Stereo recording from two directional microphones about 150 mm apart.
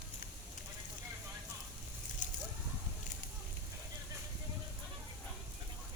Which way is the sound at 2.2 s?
55° left (ahead or behind).